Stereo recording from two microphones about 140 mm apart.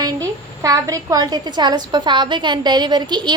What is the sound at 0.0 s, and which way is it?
A woman's voice, 25° right (ahead or behind).